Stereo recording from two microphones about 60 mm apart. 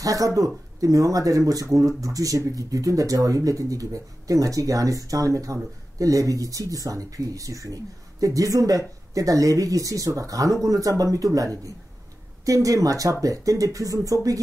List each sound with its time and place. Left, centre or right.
0.0 s speech: right